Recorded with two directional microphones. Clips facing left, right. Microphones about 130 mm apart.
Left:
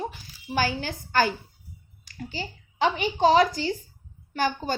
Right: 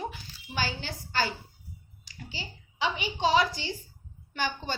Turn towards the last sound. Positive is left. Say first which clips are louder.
# left 6 dB
turn(degrees=45)  # may be behind; listen again after turning